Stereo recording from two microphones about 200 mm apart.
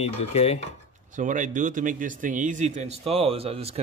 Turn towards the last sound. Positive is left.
turn(degrees=-30)  # may be behind; listen again after turning